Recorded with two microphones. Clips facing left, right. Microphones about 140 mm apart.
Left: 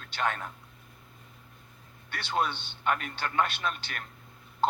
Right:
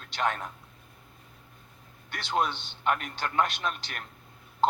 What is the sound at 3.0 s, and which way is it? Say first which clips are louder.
Speech: right 1 dB; 45° right (ahead or behind).